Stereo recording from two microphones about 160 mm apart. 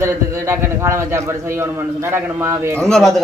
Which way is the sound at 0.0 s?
15° right (ahead or behind).